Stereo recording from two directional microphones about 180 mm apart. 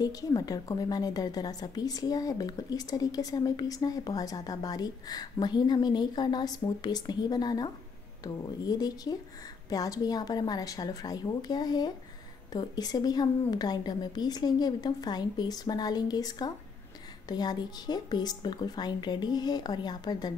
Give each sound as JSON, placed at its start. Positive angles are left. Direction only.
{"t": 0.0, "sound": "a woman's voice", "side_deg": 20}